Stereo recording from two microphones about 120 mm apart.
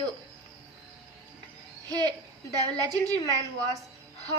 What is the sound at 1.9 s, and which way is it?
A woman's voice, 35° right (ahead or behind).